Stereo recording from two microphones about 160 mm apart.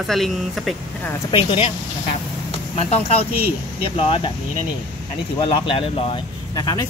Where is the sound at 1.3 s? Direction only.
35° left (ahead or behind).